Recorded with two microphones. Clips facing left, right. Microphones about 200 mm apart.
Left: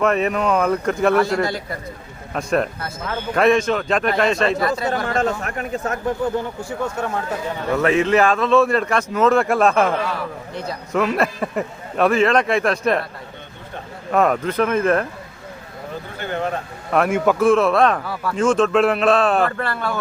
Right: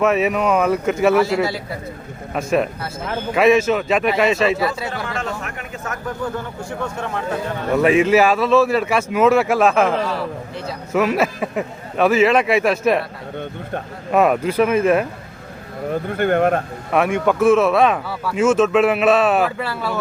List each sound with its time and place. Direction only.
0.0 s speech: 5° right (ahead or behind)
5.0 s speech: 40° left (ahead or behind)
7.8 s speech: 10° right (ahead or behind)
14.1 s speech: 10° right (ahead or behind)
15.9 s speech: 55° right (ahead or behind)
16.9 s speech: centre (ahead or behind)